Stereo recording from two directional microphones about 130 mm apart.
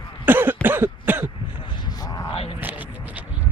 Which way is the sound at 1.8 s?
30° left (ahead or behind).